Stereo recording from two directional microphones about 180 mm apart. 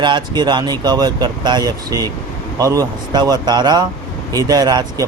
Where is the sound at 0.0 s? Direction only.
25° right (ahead or behind).